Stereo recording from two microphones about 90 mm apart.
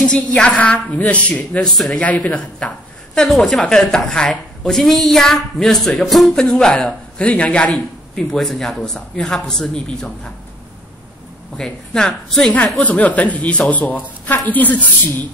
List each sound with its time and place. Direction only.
0.0 s speech: 10° left (ahead or behind)
1.7 s a woman's voice: centre (ahead or behind)
2.0 s speech: 15° left (ahead or behind)
3.2 s a woman's voice: centre (ahead or behind)
6.4 s speech: 15° left (ahead or behind)
11.5 s a woman's voice: 5° left (ahead or behind)
12.8 s a woman's voice: 15° left (ahead or behind)